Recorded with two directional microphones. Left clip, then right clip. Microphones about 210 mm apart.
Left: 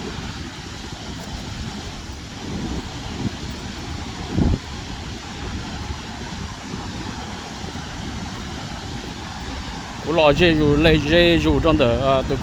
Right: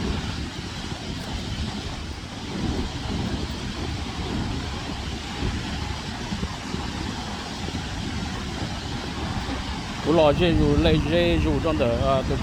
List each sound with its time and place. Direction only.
10.1 s speech: 35° left (ahead or behind)